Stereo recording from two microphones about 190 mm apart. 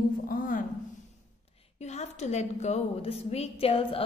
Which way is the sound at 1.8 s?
35° left (ahead or behind).